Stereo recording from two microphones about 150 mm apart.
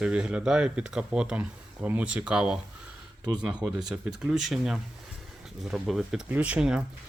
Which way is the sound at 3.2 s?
30° right (ahead or behind).